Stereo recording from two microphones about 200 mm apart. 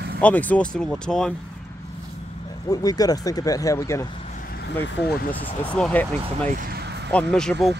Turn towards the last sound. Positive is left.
turn(degrees=5)  # may be behind; listen again after turning